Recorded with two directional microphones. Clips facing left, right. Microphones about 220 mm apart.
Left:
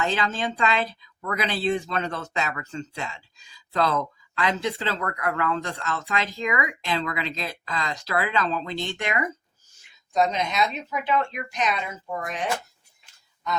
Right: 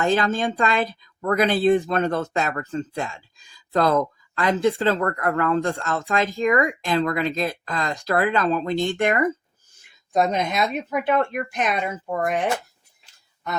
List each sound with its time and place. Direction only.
0.0 s speech: 50° right (ahead or behind)